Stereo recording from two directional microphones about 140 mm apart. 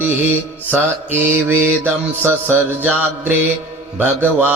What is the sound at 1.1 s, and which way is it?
Mantra, 15° right (ahead or behind).